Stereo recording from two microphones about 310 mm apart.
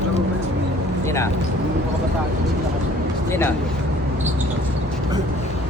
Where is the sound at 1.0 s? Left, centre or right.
Centre.